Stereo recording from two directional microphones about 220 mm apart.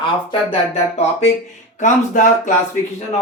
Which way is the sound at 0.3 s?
30° left (ahead or behind).